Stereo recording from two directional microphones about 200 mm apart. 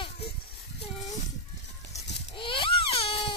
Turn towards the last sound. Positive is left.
turn(degrees=25)  # may be behind; listen again after turning